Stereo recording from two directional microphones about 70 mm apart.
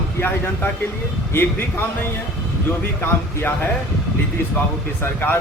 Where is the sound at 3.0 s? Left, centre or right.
Left.